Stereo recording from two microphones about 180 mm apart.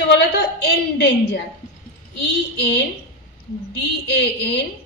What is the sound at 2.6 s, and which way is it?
Speech, 75° left (ahead or behind).